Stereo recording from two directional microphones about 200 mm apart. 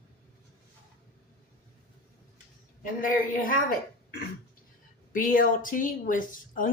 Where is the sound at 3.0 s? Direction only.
45° left (ahead or behind).